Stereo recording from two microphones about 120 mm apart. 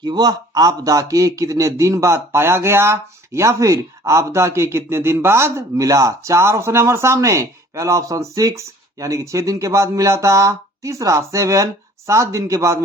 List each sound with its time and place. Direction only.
0.0 s speech: 35° right (ahead or behind)